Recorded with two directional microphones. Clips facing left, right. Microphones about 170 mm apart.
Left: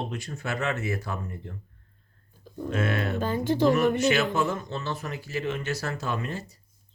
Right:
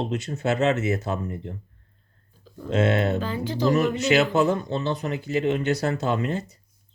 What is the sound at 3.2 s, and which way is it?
Speech, 45° left (ahead or behind).